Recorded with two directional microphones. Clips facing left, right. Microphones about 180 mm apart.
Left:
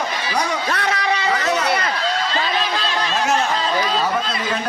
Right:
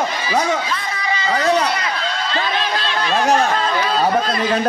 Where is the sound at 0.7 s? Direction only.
70° left (ahead or behind).